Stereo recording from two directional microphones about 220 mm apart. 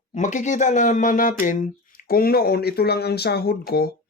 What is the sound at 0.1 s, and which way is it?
Speech, 35° left (ahead or behind).